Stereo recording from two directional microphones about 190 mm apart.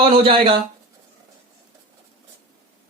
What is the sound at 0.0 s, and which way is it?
Speech, 30° right (ahead or behind).